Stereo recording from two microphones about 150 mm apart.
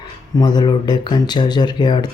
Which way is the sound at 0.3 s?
30° left (ahead or behind).